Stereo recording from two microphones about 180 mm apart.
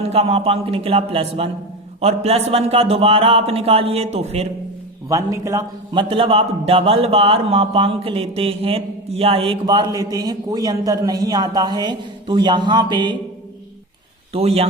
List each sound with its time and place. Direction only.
0.0 s a man's voice: 35° right (ahead or behind)
5.0 s a man's voice: 15° right (ahead or behind)
14.3 s a man's voice: 35° right (ahead or behind)